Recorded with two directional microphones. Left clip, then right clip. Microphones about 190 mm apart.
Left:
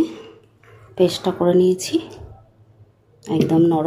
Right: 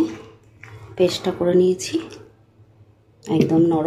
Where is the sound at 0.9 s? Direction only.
10° left (ahead or behind).